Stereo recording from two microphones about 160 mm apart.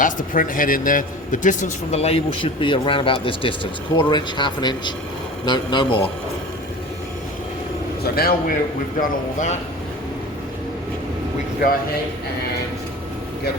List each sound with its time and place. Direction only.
0.0 s a man's voice: 55° left (ahead or behind); by 6.0 s 30° left (ahead or behind)
8.0 s a man's voice: 70° left (ahead or behind)
9.0 s speech: 50° left (ahead or behind)